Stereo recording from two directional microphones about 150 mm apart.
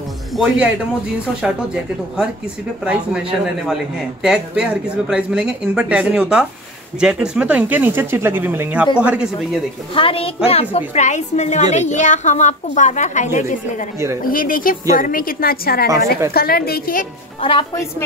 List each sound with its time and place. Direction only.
0.3 s speech: centre (ahead or behind)
9.9 s a woman's voice: 40° left (ahead or behind); by 13.8 s 55° left (ahead or behind)
14.2 s a woman's voice: 70° left (ahead or behind)
17.4 s a woman's voice: 35° left (ahead or behind)